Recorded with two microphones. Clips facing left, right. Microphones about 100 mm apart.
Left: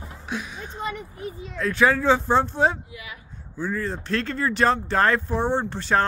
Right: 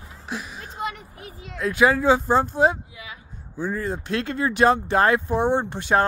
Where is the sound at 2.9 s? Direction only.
25° right (ahead or behind).